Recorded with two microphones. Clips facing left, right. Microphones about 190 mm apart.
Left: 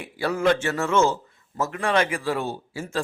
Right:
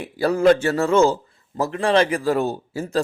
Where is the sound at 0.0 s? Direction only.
35° right (ahead or behind).